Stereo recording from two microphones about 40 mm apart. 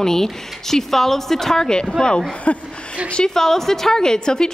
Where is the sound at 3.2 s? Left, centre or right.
Centre.